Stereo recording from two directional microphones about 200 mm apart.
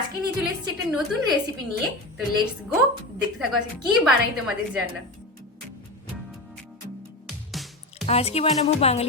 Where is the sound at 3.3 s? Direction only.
5° right (ahead or behind).